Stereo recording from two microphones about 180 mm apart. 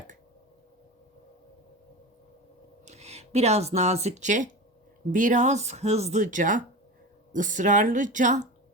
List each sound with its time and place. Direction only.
2.8 s speech: 35° right (ahead or behind)